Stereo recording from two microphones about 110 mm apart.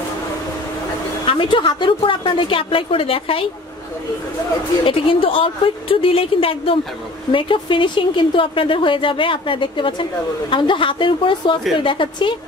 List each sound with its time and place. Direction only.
1.2 s a woman's voice: 50° left (ahead or behind)
4.8 s a woman's voice: 55° left (ahead or behind)